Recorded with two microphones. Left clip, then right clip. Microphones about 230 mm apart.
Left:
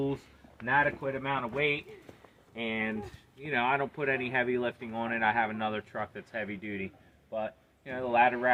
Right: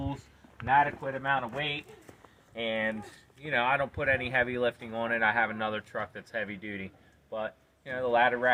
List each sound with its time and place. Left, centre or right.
0.9 s speech: centre
2.6 s speech: right